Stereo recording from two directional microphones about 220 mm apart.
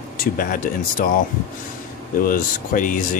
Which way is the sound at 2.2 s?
40° left (ahead or behind).